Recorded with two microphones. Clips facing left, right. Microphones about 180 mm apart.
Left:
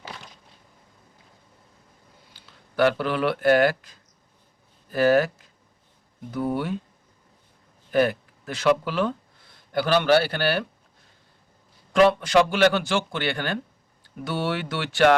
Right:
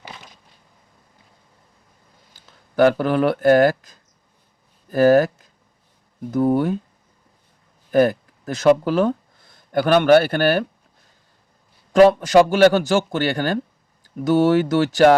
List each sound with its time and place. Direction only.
2.3 s speech: 45° right (ahead or behind)
6.3 s speech: 45° right (ahead or behind)
7.9 s speech: 40° right (ahead or behind)
11.9 s speech: 40° right (ahead or behind)